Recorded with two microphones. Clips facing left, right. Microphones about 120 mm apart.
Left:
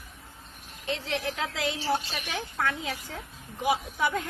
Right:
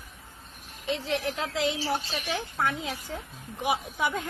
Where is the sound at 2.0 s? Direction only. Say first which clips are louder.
Right 4 dB; 30° right (ahead or behind).